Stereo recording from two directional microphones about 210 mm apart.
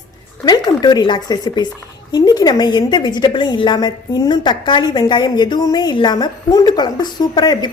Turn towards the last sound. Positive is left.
turn(degrees=20)  # may be behind; listen again after turning